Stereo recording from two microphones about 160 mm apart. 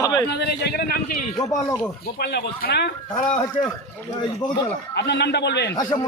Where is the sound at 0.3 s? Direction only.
90° left.